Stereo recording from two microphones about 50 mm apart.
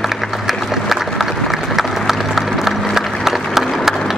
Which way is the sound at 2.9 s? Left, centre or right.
Centre.